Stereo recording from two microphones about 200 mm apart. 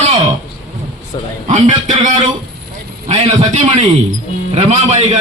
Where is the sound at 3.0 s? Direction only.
30° right (ahead or behind).